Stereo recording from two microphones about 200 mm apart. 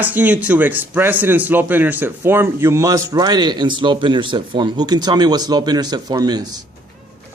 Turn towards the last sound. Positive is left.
turn(degrees=-20)  # may be behind; listen again after turning